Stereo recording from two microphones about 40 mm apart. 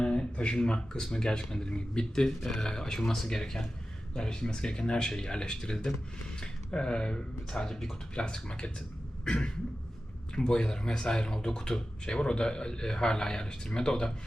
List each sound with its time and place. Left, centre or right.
0.0 s speech: left
8.1 s speech: left